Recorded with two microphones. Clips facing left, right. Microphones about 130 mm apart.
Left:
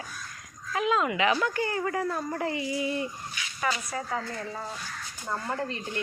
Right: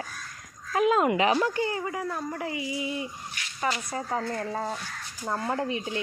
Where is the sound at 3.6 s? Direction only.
30° right (ahead or behind).